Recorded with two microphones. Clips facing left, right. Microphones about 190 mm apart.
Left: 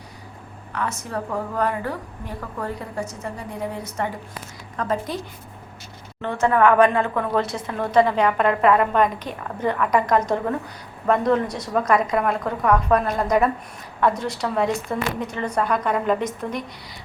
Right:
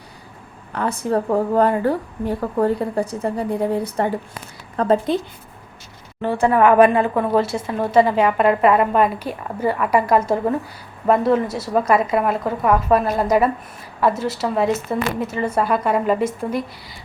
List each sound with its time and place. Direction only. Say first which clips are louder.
0.7 s a woman's voice: right 7 dB; 30° right (ahead or behind)
6.4 s a woman's voice: right 3 dB; 15° right (ahead or behind)